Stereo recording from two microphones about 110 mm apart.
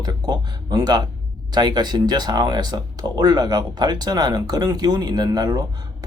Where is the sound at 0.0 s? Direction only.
35° right (ahead or behind).